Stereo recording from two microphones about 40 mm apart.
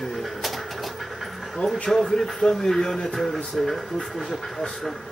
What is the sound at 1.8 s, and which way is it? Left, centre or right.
Speech, centre.